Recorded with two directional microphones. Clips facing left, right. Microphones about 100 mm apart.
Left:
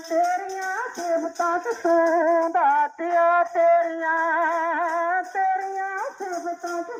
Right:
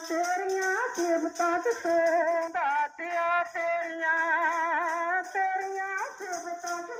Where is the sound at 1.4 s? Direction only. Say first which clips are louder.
Left 3 dB; 25° left (ahead or behind).